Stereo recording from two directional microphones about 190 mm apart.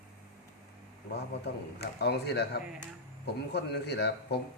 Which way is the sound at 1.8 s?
60° left (ahead or behind).